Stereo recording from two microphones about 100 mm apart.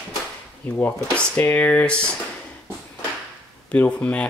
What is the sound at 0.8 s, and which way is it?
Speech, 15° left (ahead or behind).